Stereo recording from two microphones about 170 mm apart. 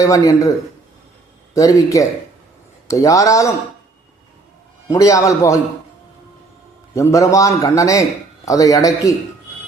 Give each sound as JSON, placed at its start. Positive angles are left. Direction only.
{"t": 0.0, "sound": "a man's voice", "side_deg": 20}
{"t": 1.5, "sound": "a man's voice", "side_deg": 20}
{"t": 4.9, "sound": "a man's voice", "side_deg": 20}
{"t": 6.9, "sound": "a man's voice", "side_deg": 20}